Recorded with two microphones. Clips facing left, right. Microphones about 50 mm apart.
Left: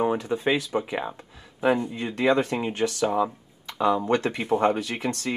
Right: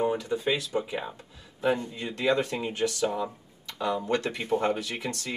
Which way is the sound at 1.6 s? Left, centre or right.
Centre.